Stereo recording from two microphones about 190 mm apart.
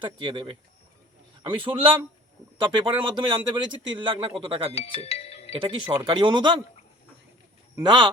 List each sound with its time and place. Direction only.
0.0 s speech: 25° right (ahead or behind)
4.7 s speech: 30° left (ahead or behind)
5.5 s speech: 25° right (ahead or behind)
7.8 s speech: 25° right (ahead or behind)